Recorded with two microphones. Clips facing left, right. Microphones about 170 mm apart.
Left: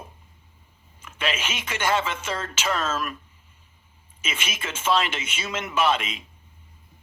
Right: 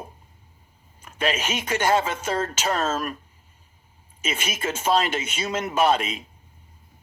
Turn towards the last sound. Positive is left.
turn(degrees=-40)  # may be behind; listen again after turning